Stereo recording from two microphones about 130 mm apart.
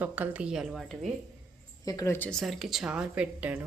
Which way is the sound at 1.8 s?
25° left (ahead or behind).